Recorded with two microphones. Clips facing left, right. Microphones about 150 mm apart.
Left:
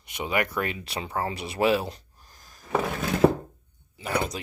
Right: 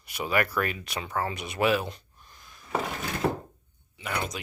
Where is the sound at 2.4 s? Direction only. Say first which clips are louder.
Even; 40° left (ahead or behind).